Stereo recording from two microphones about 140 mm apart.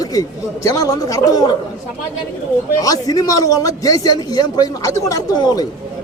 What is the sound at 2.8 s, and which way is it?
Speech, 25° left (ahead or behind).